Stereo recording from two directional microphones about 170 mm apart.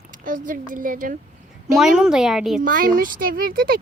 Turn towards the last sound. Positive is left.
turn(degrees=-60)  # may be behind; listen again after turning